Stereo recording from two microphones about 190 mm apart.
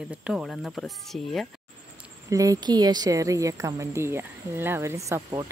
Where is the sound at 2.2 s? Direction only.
20° right (ahead or behind).